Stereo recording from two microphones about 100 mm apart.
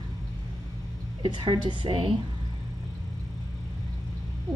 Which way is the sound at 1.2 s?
50° right (ahead or behind).